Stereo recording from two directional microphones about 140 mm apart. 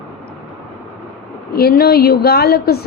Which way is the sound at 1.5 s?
90° left.